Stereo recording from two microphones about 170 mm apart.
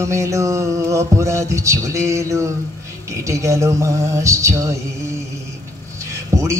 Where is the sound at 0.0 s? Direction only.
15° right (ahead or behind).